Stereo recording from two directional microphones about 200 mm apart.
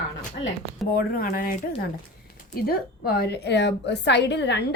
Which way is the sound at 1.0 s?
45° left (ahead or behind).